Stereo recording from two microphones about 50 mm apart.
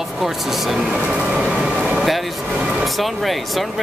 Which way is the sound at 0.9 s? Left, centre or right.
Centre.